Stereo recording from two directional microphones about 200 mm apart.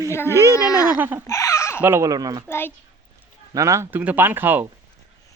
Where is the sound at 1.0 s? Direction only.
10° right (ahead or behind).